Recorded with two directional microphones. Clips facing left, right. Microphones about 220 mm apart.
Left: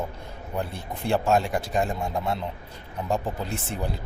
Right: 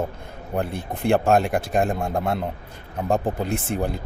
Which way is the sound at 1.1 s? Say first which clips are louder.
Right 4 dB; 55° right (ahead or behind).